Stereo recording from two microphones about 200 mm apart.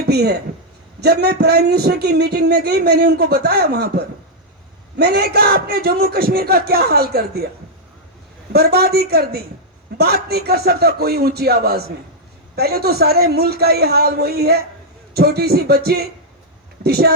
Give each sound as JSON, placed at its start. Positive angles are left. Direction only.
{"t": 0.0, "sound": "a man's voice", "side_deg": -55}
{"t": 8.5, "sound": "a man's voice", "side_deg": -50}